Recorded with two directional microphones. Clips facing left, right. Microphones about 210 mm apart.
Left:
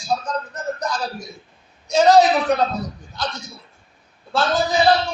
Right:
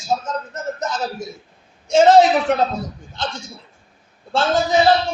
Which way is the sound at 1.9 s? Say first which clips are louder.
Right 2 dB; 25° right (ahead or behind).